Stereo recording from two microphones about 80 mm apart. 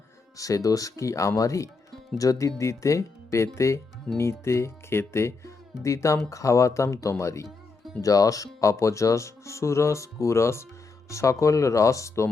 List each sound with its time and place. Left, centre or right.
0.3 s speech: left